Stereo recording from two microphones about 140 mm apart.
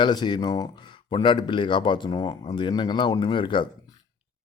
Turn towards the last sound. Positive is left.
turn(degrees=35)  # may be behind; listen again after turning